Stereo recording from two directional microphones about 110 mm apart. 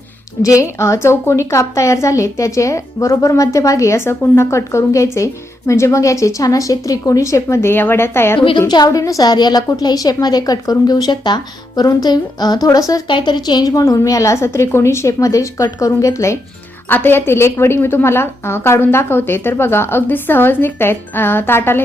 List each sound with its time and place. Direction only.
0.4 s a woman's voice: 30° left (ahead or behind)
8.4 s a woman's voice: 50° left (ahead or behind)
8.6 s a woman's voice: 35° left (ahead or behind); by 21.8 s 20° left (ahead or behind)